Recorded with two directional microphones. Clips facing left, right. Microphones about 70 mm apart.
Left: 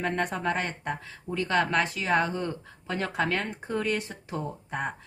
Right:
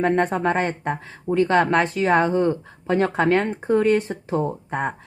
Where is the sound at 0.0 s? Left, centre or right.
Right.